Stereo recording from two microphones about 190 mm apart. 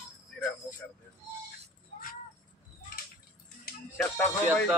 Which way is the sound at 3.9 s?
10° left (ahead or behind).